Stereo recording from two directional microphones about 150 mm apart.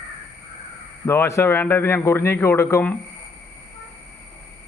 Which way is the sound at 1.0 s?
20° left (ahead or behind).